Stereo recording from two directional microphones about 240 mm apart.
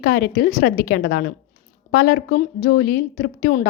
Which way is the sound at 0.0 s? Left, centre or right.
Left.